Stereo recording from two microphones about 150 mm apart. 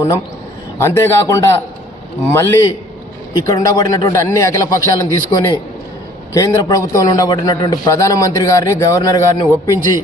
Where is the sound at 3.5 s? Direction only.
25° left (ahead or behind).